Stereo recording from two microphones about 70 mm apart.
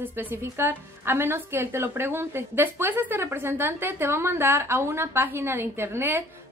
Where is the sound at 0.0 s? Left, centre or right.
Right.